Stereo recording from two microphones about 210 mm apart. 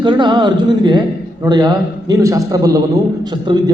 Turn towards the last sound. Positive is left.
turn(degrees=-20)  # may be behind; listen again after turning